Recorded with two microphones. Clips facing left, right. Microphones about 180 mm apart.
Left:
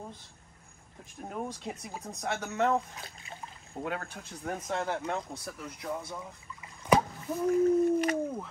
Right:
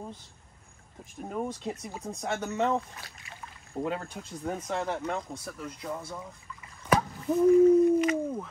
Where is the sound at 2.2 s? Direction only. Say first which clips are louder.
Right 1 dB; centre (ahead or behind).